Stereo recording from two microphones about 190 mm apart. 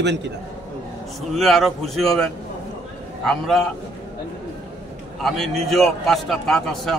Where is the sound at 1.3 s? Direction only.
Centre (ahead or behind).